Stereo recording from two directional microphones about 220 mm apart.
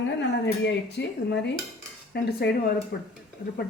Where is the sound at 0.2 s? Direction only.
50° left (ahead or behind).